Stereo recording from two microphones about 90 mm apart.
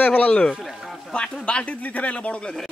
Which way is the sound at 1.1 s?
10° left (ahead or behind).